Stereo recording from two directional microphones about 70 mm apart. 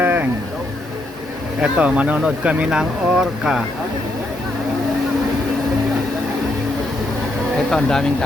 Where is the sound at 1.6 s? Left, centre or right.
Centre.